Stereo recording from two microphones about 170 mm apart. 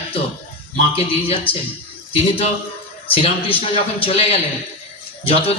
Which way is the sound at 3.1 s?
30° left (ahead or behind).